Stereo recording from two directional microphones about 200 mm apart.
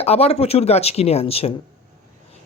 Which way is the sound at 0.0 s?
30° left (ahead or behind).